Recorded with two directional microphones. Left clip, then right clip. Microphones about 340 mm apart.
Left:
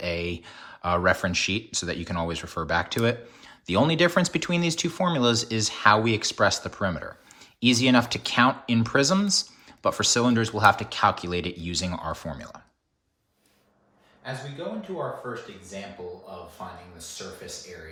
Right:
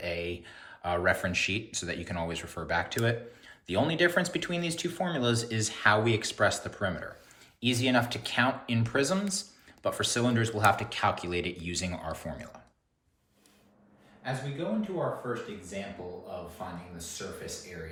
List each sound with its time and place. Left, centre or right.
0.0 s speech: centre
14.2 s a man's voice: centre
15.7 s speech: centre